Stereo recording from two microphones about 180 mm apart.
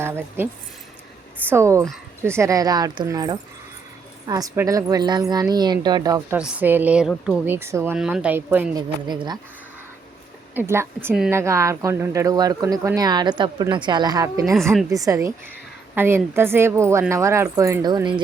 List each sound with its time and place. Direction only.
0.0 s speech: 10° right (ahead or behind)
1.5 s a woman's voice: 15° right (ahead or behind)
6.3 s a woman's voice: 10° right (ahead or behind)
8.7 s a woman's voice: 25° right (ahead or behind)
10.5 s a woman's voice: 10° right (ahead or behind)
14.5 s a woman's voice: centre (ahead or behind)
14.8 s a woman's voice: 20° right (ahead or behind)